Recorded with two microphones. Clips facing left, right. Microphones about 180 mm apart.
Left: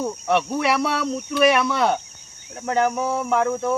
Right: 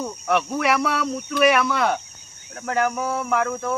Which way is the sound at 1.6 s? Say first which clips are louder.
Left 1 dB; 25° left (ahead or behind).